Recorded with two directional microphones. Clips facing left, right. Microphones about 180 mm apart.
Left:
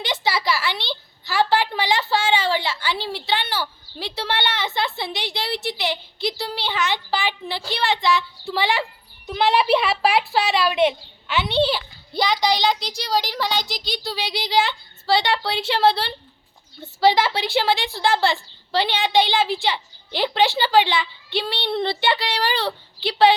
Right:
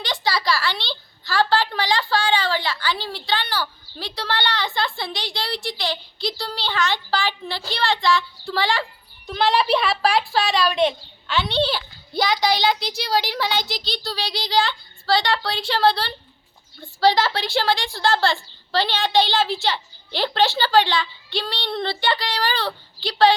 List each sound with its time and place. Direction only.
0.0 s a woman's voice: 20° left (ahead or behind)
11.7 s a child's voice: centre (ahead or behind)
13.7 s a woman's voice: 15° left (ahead or behind)